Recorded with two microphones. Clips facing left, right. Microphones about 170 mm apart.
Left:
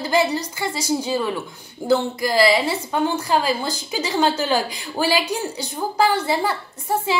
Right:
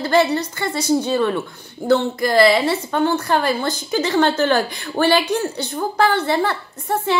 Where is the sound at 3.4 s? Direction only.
10° left (ahead or behind).